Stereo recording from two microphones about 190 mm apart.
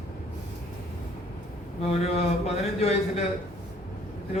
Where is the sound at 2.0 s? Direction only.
35° left (ahead or behind).